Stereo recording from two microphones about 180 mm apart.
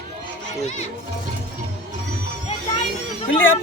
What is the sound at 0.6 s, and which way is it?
Speech, 40° left (ahead or behind).